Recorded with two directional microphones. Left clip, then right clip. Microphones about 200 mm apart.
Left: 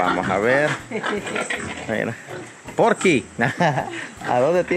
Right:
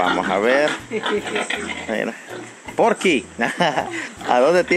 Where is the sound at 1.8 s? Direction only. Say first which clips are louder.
Even; centre (ahead or behind).